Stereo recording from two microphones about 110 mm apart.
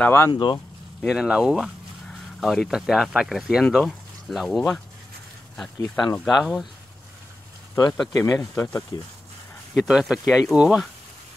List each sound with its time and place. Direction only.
0.0 s speech: 20° left (ahead or behind)
0.3 s speech: 45° left (ahead or behind)
1.0 s speech: 5° right (ahead or behind)
5.8 s speech: 40° left (ahead or behind)
6.2 s speech: centre (ahead or behind)
8.1 s speech: 30° left (ahead or behind)
8.9 s speech: 40° left (ahead or behind)
9.8 s speech: 5° right (ahead or behind)